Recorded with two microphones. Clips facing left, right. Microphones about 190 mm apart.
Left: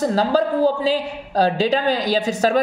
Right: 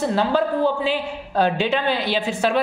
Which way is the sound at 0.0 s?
40° left (ahead or behind).